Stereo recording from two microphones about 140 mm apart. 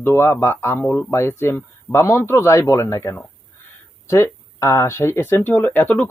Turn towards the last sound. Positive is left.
turn(degrees=15)  # may be behind; listen again after turning